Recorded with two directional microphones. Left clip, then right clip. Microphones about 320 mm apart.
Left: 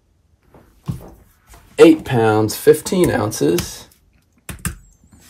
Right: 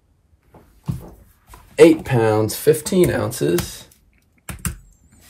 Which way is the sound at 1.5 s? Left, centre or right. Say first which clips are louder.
Left 2 dB; centre.